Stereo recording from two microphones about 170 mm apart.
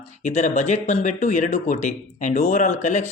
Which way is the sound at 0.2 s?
45° left (ahead or behind).